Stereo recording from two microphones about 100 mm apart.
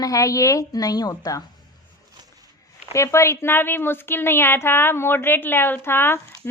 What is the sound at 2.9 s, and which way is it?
Speech, 30° left (ahead or behind).